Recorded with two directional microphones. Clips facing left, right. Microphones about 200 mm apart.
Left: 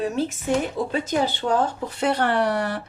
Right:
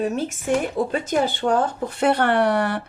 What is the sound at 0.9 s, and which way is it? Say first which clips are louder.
A woman's voice: right 1 dB; 50° right (ahead or behind).